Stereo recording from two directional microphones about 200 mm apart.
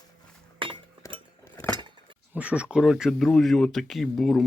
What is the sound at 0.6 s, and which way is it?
Chink, 25° right (ahead or behind).